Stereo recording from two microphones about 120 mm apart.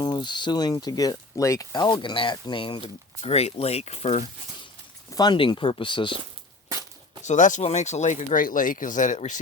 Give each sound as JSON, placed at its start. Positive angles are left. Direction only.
{"t": 0.0, "sound": "speech", "side_deg": 35}
{"t": 3.2, "sound": "speech", "side_deg": 60}
{"t": 5.1, "sound": "speech", "side_deg": 40}
{"t": 7.3, "sound": "speech", "side_deg": 90}